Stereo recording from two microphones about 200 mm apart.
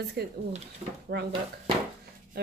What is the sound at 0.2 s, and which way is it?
A woman's voice, 55° right (ahead or behind).